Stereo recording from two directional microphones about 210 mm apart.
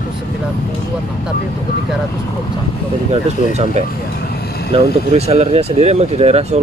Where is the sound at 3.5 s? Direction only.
35° right (ahead or behind).